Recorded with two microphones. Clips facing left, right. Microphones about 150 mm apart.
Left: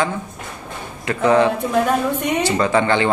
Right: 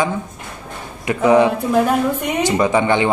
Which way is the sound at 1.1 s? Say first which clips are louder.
Right 2 dB; 15° right (ahead or behind).